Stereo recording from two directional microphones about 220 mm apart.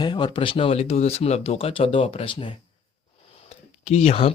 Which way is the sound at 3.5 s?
30° left (ahead or behind).